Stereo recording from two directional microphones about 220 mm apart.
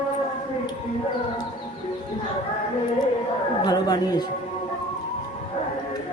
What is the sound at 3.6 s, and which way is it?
Speech, 20° left (ahead or behind).